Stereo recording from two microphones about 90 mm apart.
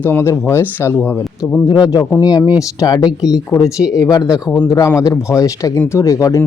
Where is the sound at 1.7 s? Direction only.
45° left (ahead or behind).